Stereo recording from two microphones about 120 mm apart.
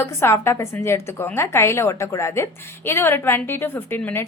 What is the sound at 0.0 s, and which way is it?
A woman's voice, 20° left (ahead or behind).